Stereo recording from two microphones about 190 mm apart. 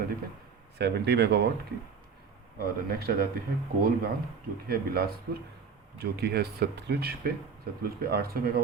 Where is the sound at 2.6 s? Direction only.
55° right (ahead or behind).